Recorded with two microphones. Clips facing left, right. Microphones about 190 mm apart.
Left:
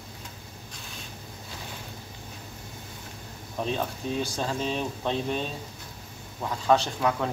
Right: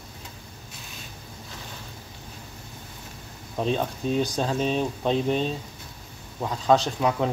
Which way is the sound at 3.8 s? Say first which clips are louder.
Right 4 dB; 15° right (ahead or behind).